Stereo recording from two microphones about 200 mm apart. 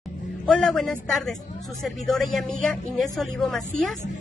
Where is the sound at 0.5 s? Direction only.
5° left (ahead or behind).